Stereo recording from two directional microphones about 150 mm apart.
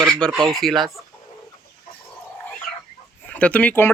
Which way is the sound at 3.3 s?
10° left (ahead or behind).